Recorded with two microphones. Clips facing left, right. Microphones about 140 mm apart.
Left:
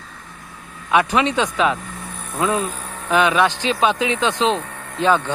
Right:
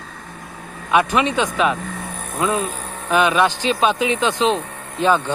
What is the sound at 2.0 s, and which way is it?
Vehicle, 50° right (ahead or behind).